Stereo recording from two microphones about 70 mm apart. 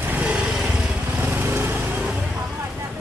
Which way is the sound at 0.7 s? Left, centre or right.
Right.